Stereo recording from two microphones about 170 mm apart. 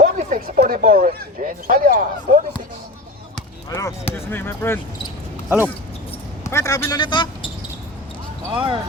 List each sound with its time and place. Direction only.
0.0 s speech: 50° right (ahead or behind)
3.7 s speech: 20° left (ahead or behind)
6.4 s a man's voice: 15° left (ahead or behind)
7.0 s speech: 25° left (ahead or behind)
8.5 s speech: 30° right (ahead or behind)